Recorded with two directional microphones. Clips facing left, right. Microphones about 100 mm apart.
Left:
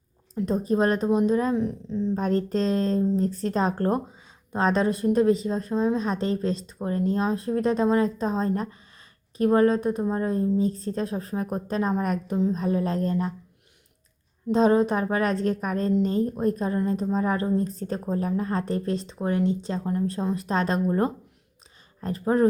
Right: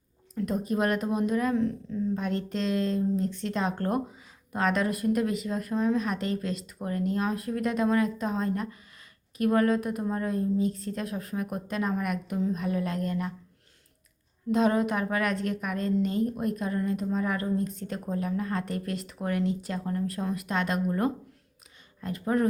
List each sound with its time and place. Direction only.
0.3 s a woman's voice: 30° left (ahead or behind)
2.1 s speech: 40° left (ahead or behind)
14.5 s speech: 30° left (ahead or behind)